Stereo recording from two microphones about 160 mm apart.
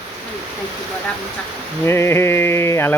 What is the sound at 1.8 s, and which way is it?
Mantra, 15° left (ahead or behind).